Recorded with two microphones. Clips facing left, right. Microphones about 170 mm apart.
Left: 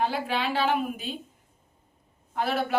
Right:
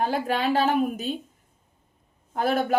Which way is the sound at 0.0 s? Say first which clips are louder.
Right 3 dB; 45° right (ahead or behind).